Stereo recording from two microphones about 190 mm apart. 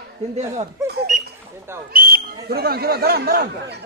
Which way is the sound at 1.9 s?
50° right (ahead or behind).